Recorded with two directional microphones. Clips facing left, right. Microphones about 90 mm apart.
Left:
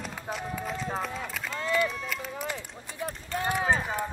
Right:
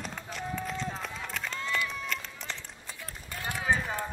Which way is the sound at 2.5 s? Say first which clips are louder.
Left 5 dB; 10° left (ahead or behind).